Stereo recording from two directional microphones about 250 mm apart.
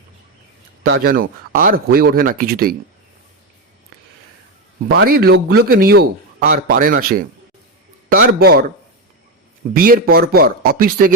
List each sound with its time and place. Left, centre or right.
0.9 s a man's voice: right
4.9 s a man's voice: right
9.7 s a man's voice: right